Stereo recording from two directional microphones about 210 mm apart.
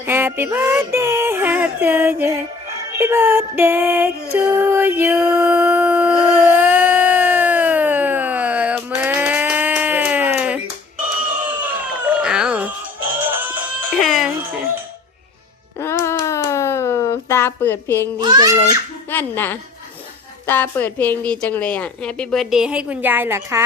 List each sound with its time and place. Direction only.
0.0 s music: 10° right (ahead or behind)
11.6 s a sound: 5° right (ahead or behind)
15.8 s music: 10° left (ahead or behind)
16.2 s a sound: 15° left (ahead or behind)
18.2 s a child's voice: 20° right (ahead or behind)
19.1 s a woman's voice: 10° left (ahead or behind); by 23.6 s 10° right (ahead or behind)